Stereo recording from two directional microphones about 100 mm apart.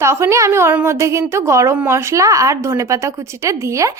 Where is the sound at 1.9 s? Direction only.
30° right (ahead or behind).